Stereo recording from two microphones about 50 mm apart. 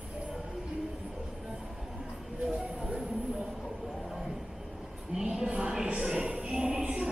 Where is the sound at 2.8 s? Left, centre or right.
Centre.